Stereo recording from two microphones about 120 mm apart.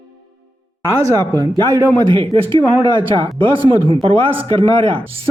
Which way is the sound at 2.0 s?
45° right (ahead or behind).